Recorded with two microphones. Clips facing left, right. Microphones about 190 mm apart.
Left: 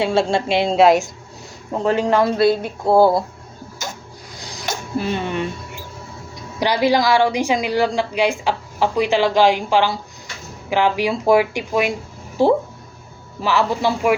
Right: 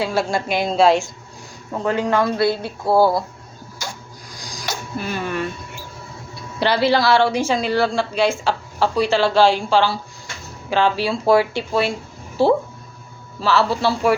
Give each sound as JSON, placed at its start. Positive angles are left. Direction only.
{"t": 0.0, "sound": "speech", "side_deg": 25}
{"t": 3.8, "sound": "printer", "side_deg": 20}
{"t": 4.4, "sound": "a sound", "side_deg": 25}
{"t": 6.3, "sound": "speech", "side_deg": 15}